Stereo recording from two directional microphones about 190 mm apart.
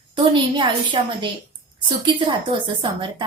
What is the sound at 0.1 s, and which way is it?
A woman's voice, 25° right (ahead or behind).